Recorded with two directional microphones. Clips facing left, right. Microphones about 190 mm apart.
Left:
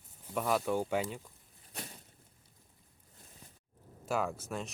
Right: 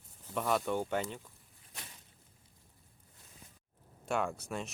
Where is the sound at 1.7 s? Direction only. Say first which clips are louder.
Left 7 dB; 40° left (ahead or behind).